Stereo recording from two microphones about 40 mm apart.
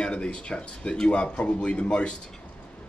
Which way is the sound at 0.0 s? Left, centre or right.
Left.